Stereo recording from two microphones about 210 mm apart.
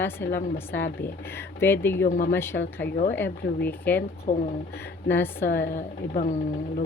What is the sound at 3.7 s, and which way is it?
Speech, 10° left (ahead or behind).